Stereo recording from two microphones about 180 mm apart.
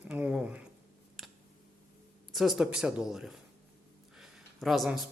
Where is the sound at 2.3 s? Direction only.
Centre (ahead or behind).